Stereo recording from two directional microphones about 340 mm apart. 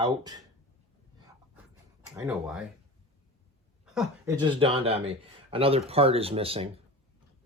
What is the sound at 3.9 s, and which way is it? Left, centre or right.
Speech, centre.